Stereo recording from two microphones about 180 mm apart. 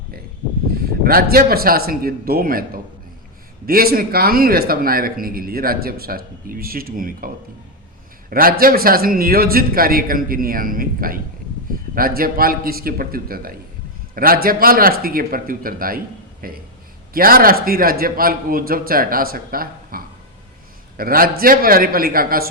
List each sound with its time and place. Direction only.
1.0 s speech: 55° right (ahead or behind)
8.3 s a man's voice: 55° right (ahead or behind)